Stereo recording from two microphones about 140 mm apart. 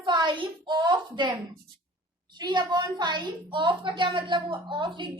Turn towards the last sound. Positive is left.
turn(degrees=-35)  # may be behind; listen again after turning